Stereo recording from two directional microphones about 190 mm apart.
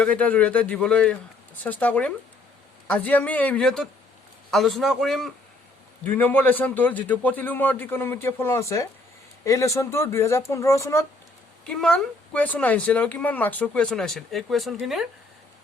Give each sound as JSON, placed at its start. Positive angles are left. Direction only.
{"t": 0.0, "sound": "a man's voice", "side_deg": 5}
{"t": 11.6, "sound": "speech", "side_deg": 5}